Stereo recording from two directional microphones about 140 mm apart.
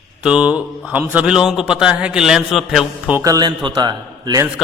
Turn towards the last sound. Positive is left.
turn(degrees=-30)  # may be behind; listen again after turning